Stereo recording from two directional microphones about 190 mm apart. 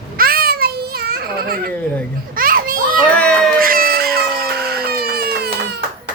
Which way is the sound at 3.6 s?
50° right (ahead or behind).